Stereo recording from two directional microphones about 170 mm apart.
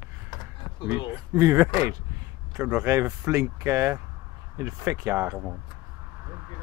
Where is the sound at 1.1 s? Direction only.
15° right (ahead or behind).